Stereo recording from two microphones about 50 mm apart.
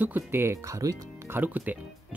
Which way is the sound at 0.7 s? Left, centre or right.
Right.